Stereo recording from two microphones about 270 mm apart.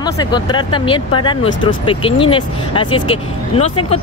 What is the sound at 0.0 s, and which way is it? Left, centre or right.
Speech, centre.